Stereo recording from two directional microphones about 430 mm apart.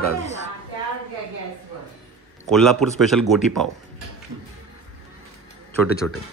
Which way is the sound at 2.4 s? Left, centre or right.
Centre.